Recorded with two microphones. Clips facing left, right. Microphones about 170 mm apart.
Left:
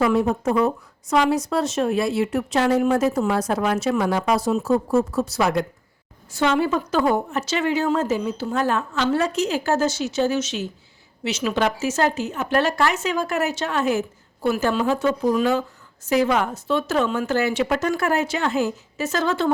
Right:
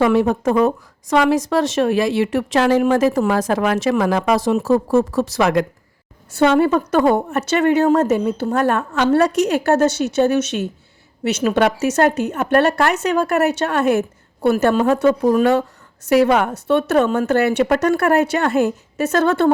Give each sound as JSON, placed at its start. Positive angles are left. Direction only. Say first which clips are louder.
{"t": 0.0, "sound": "speech", "louder": "right 4 dB", "side_deg": -85}
{"t": 6.4, "sound": "a woman's voice", "louder": "right 6 dB", "side_deg": -55}